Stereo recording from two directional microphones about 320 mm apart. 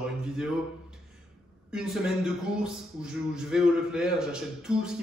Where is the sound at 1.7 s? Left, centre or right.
Centre.